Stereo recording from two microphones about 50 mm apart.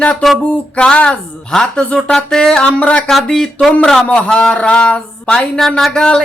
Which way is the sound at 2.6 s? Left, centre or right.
Left.